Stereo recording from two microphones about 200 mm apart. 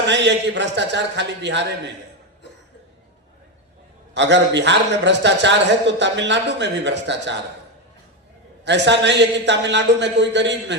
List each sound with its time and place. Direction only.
0.1 s a man's voice: 60° right (ahead or behind)
4.1 s a man's voice: 60° right (ahead or behind)
8.6 s a man's voice: 60° right (ahead or behind)